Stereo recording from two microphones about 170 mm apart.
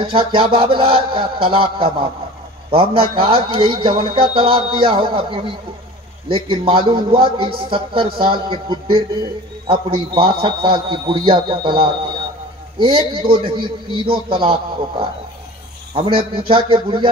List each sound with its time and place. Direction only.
0.0 s a man's voice: 30° right (ahead or behind)